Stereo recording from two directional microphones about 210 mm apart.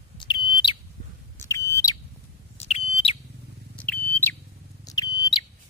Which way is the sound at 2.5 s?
30° left (ahead or behind).